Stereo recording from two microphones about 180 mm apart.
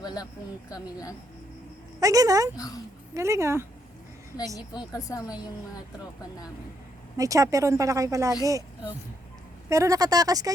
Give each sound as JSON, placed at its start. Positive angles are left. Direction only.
{"t": 0.0, "sound": "a sound", "side_deg": 20}
{"t": 0.7, "sound": "a woman's voice", "side_deg": 20}
{"t": 2.0, "sound": "speech", "side_deg": -20}
{"t": 2.6, "sound": "a woman's voice", "side_deg": 20}
{"t": 3.2, "sound": "speech", "side_deg": -15}
{"t": 4.9, "sound": "a woman's voice", "side_deg": 20}
{"t": 7.2, "sound": "speech", "side_deg": -20}